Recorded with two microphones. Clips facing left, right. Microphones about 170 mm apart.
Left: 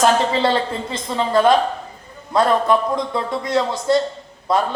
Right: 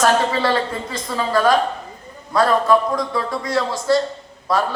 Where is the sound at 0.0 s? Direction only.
25° left (ahead or behind).